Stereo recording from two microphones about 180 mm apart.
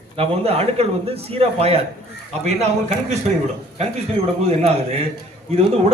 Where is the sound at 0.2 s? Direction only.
35° right (ahead or behind).